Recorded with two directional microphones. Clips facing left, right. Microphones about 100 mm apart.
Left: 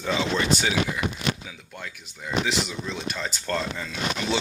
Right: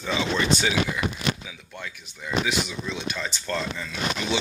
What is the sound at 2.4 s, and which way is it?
Speech, 40° left (ahead or behind).